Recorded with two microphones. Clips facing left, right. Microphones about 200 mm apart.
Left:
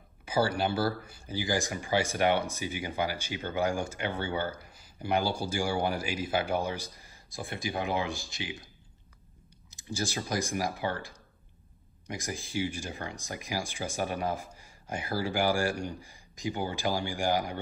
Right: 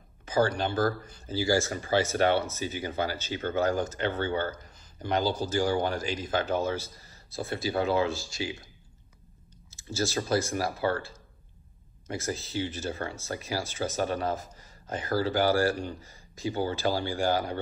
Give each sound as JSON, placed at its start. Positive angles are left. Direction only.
{"t": 0.2, "sound": "speech", "side_deg": 10}
{"t": 9.7, "sound": "speech", "side_deg": 15}